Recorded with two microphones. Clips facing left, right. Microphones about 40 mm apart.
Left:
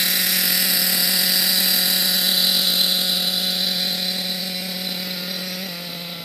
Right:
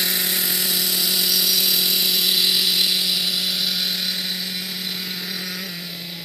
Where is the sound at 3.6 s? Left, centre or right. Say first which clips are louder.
Even; left.